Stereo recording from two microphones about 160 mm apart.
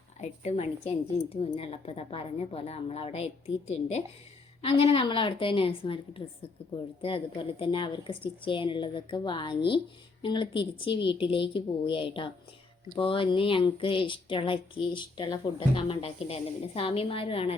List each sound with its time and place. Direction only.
0.2 s a woman's voice: 45° left (ahead or behind)